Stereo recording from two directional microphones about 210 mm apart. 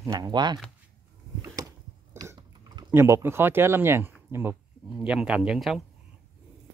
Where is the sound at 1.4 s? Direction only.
20° right (ahead or behind).